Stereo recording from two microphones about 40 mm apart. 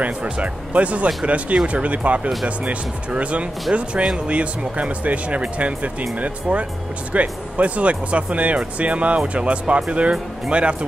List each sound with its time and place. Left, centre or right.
0.0 s speech: right